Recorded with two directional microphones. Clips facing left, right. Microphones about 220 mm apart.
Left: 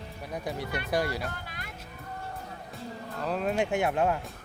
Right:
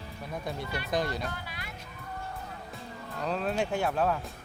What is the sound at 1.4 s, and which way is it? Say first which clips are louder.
Music: even; 45° left (ahead or behind).